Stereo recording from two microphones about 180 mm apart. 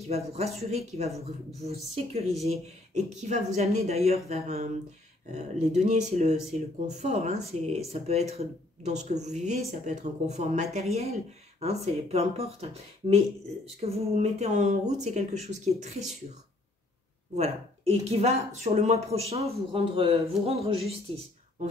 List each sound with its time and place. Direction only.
0.1 s speech: 35° right (ahead or behind)
5.8 s speech: 40° right (ahead or behind)
17.4 s speech: 40° right (ahead or behind)